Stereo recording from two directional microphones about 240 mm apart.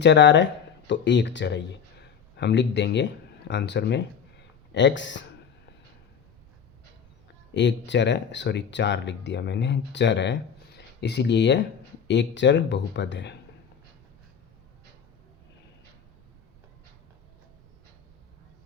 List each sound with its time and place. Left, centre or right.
0.0 s speech: left
7.5 s speech: left